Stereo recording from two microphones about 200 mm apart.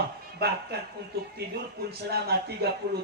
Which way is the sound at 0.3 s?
55° right (ahead or behind).